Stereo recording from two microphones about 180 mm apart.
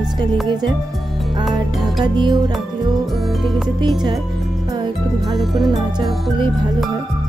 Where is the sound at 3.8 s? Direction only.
25° right (ahead or behind).